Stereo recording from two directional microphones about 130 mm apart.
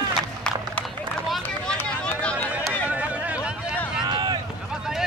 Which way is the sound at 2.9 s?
10° right (ahead or behind).